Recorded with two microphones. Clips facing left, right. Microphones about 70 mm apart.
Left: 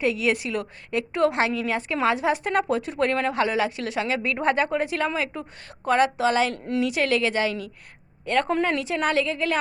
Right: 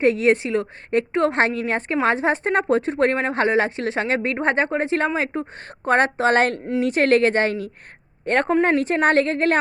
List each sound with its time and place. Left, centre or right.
0.0 s a woman's voice: right
6.7 s a woman's voice: right